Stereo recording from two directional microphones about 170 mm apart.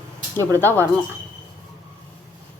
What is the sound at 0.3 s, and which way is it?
Speech, 15° left (ahead or behind).